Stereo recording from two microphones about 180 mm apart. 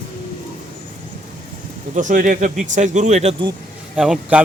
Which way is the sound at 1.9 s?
45° right (ahead or behind).